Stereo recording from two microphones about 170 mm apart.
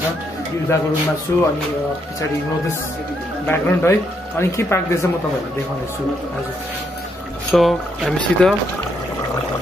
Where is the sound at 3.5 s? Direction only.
15° left (ahead or behind).